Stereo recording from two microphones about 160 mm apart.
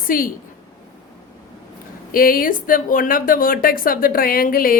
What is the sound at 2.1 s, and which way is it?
Speech, 60° left (ahead or behind).